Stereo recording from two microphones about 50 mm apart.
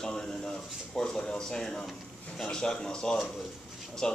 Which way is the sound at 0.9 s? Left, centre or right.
Centre.